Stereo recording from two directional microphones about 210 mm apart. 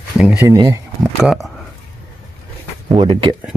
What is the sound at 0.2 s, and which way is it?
Speech, 5° right (ahead or behind).